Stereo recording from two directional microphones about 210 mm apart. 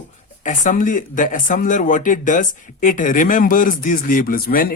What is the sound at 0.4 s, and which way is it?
Speech, 35° left (ahead or behind).